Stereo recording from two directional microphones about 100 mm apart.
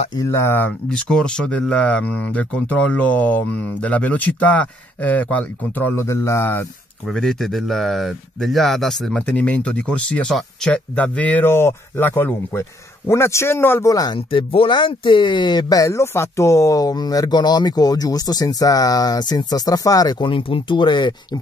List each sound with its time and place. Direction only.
0.2 s speech: 25° left (ahead or behind)
0.9 s speech: 10° left (ahead or behind)
5.9 s speech: 30° left (ahead or behind)
7.1 s speech: 5° left (ahead or behind)
9.2 s speech: 15° left (ahead or behind)
13.8 s speech: 35° left (ahead or behind)
14.1 s speech: 65° left (ahead or behind); by 20.2 s 40° left (ahead or behind)
20.2 s speech: 60° left (ahead or behind)